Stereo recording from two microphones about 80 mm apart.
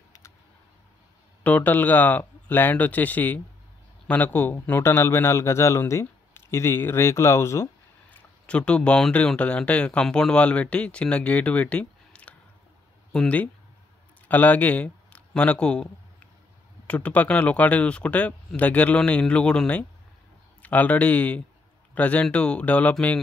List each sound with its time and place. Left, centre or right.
1.4 s a man's voice: left
8.1 s a sound: centre
9.4 s speech: centre
14.2 s speech: left